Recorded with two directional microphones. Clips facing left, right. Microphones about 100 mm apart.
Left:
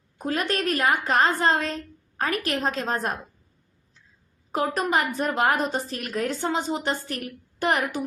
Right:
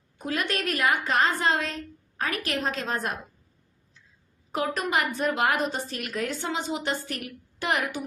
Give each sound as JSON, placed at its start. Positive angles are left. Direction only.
{"t": 0.2, "sound": "a woman's voice", "side_deg": 40}
{"t": 4.5, "sound": "a woman's voice", "side_deg": 35}